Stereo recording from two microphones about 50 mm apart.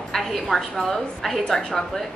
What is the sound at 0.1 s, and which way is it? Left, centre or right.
A woman's voice, centre.